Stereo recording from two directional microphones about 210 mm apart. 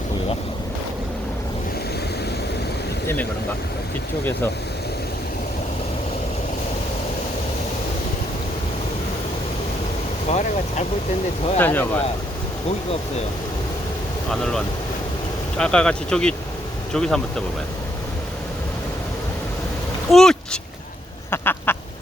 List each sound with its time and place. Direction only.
10.2 s speech: 35° left (ahead or behind)
11.5 s speech: 10° left (ahead or behind)
14.3 s speech: 5° left (ahead or behind)
20.1 s a sound: centre (ahead or behind)
21.2 s duck: 10° left (ahead or behind)